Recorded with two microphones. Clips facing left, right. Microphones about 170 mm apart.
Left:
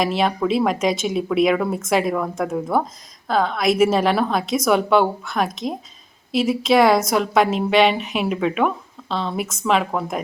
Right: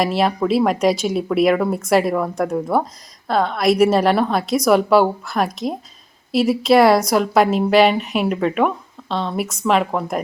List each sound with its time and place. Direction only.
0.0 s a woman's voice: centre (ahead or behind)